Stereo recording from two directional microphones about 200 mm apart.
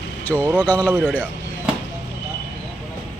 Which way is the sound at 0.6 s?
10° left (ahead or behind).